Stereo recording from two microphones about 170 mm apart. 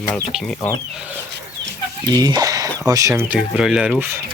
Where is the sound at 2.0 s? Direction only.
25° right (ahead or behind).